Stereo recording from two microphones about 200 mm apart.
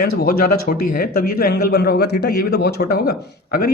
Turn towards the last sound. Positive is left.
turn(degrees=50)  # may be behind; listen again after turning